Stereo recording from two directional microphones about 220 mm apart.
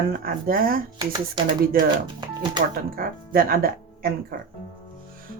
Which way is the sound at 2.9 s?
40° right (ahead or behind).